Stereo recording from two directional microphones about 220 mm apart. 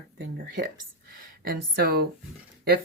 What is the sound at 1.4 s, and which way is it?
Speech, 45° right (ahead or behind).